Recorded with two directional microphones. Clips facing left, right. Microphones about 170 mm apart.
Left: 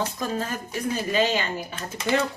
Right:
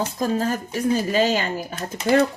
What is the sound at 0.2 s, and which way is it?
A woman's voice, 40° right (ahead or behind).